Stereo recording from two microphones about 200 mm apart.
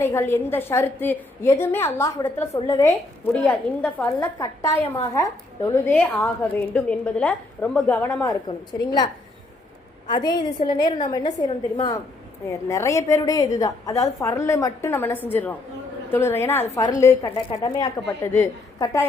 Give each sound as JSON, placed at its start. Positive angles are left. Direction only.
{"t": 0.0, "sound": "a woman's voice", "side_deg": 10}
{"t": 10.1, "sound": "a woman's voice", "side_deg": 20}